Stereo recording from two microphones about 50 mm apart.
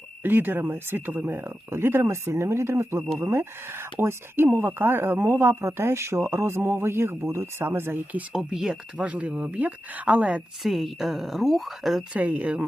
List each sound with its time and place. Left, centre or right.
0.2 s speech: right
1.3 s speech: right
8.3 s speech: centre
9.0 s speech: right
10.6 s speech: centre
12.1 s speech: right